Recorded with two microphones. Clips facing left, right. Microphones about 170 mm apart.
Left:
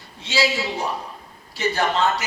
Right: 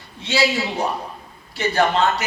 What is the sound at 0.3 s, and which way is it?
Speech, 60° right (ahead or behind).